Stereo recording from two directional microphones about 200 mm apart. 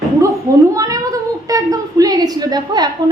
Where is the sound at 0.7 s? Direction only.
15° right (ahead or behind).